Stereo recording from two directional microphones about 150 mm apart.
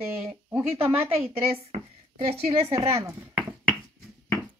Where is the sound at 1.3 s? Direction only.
45° right (ahead or behind).